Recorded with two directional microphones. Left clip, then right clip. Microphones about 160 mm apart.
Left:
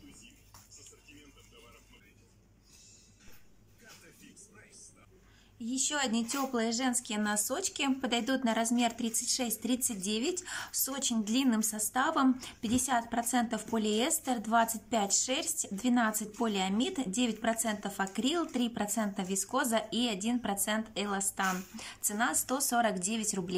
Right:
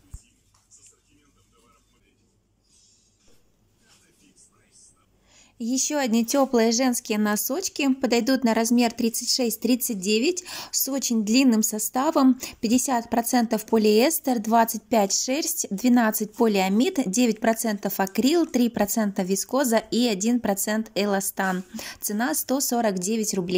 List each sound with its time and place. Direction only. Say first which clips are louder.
5.4 s speech: right 9 dB; 30° right (ahead or behind)